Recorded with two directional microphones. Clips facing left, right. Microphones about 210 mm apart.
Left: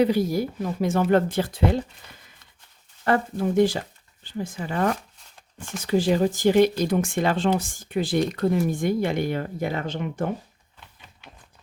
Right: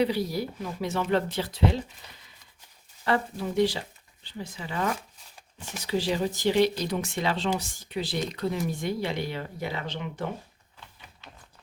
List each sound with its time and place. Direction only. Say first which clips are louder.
0.0 s speech: left 5 dB; 50° left (ahead or behind)
3.0 s speech: left 5 dB; 50° left (ahead or behind)